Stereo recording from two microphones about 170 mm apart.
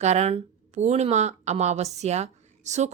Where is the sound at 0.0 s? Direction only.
40° right (ahead or behind).